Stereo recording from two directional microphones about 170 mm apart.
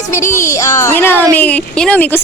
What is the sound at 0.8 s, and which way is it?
Speech, 10° left (ahead or behind).